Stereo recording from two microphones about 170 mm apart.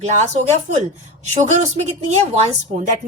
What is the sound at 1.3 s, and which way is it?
A woman's voice, 40° right (ahead or behind).